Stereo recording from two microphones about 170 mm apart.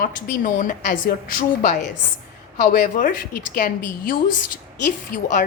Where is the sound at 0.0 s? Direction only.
50° left (ahead or behind).